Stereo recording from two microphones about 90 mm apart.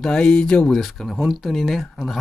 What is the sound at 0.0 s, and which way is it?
Speech, 10° left (ahead or behind).